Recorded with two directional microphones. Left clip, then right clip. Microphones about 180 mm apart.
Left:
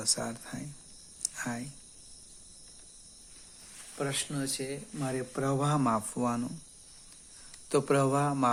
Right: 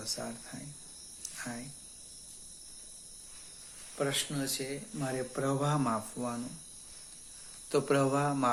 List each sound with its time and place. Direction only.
0.0 s speech: 60° left (ahead or behind)
1.2 s a sound: 60° left (ahead or behind)
3.9 s speech: 35° left (ahead or behind); by 6.4 s 55° left (ahead or behind)
7.7 s speech: 45° left (ahead or behind)